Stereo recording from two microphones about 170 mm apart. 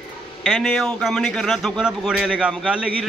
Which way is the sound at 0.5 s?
5° left (ahead or behind).